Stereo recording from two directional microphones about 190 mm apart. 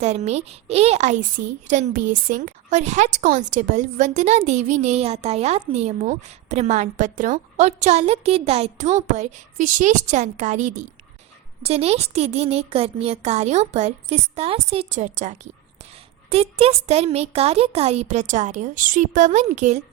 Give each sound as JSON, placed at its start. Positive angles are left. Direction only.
{"t": 0.0, "sound": "a woman's voice", "side_deg": -35}